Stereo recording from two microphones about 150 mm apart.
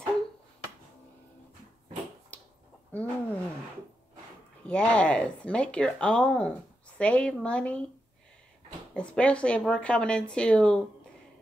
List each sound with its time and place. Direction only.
2.9 s a sound: 10° left (ahead or behind)
4.6 s speech: 5° left (ahead or behind)
8.9 s speech: 10° left (ahead or behind)